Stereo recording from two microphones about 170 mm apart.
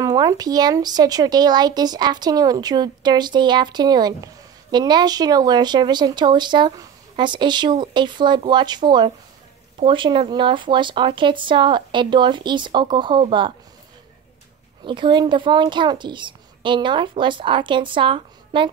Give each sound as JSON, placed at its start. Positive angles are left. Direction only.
{"t": 0.0, "sound": "speech", "side_deg": -20}
{"t": 14.9, "sound": "speech", "side_deg": -25}